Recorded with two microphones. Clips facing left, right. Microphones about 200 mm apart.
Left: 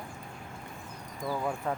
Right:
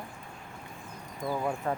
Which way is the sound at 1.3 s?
10° right (ahead or behind).